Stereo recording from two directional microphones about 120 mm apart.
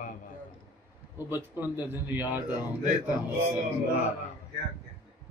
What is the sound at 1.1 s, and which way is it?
Speech, 15° right (ahead or behind).